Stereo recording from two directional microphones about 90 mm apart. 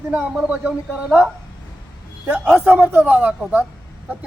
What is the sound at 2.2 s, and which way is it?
A man's voice, 15° right (ahead or behind).